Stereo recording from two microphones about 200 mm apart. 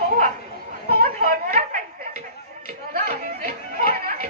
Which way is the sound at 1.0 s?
45° right (ahead or behind).